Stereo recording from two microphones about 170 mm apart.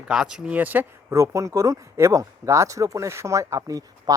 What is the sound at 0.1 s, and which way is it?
Speech, 5° right (ahead or behind).